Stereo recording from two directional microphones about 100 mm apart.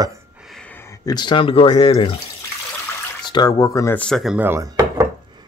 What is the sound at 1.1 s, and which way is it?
Speech, 50° left (ahead or behind).